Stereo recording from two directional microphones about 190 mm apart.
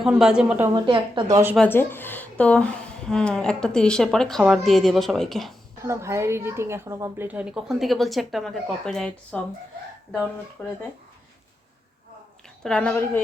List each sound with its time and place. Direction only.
0.0 s a woman's voice: 5° right (ahead or behind)
0.9 s a woman's voice: 25° right (ahead or behind)
1.5 s a woman's voice: 10° left (ahead or behind)
5.8 s a woman's voice: 15° right (ahead or behind); by 9.4 s 5° left (ahead or behind)
10.6 s speech: 10° left (ahead or behind)
12.6 s a woman's voice: 5° left (ahead or behind)